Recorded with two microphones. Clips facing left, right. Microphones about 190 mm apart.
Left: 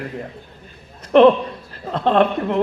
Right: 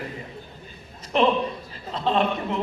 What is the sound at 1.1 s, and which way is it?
A woman's voice, 55° left (ahead or behind).